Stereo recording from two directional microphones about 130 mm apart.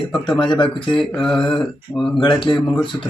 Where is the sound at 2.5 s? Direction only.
40° left (ahead or behind).